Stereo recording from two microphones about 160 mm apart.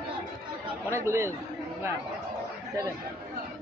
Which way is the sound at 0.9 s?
15° right (ahead or behind).